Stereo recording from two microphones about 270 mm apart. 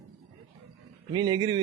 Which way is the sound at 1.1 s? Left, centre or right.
Centre.